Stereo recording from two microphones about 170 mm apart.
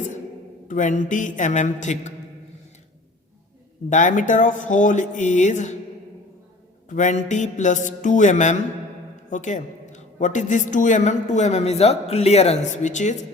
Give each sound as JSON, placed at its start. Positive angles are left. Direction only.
{"t": 0.7, "sound": "a woman's voice", "side_deg": 50}
{"t": 3.8, "sound": "a woman's voice", "side_deg": 50}
{"t": 6.8, "sound": "a woman's voice", "side_deg": 45}